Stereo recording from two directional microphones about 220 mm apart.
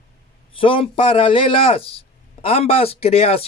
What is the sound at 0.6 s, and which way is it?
Speech, 25° left (ahead or behind).